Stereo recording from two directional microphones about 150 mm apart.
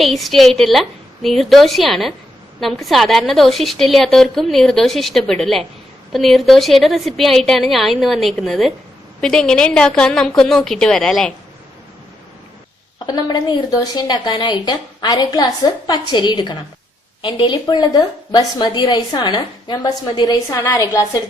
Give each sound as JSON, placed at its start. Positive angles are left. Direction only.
{"t": 0.0, "sound": "a woman's voice", "side_deg": 0}
{"t": 13.1, "sound": "a woman's voice", "side_deg": 30}